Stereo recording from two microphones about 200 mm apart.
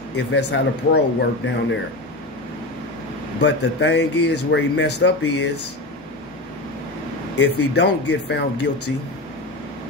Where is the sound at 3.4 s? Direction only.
60° left (ahead or behind).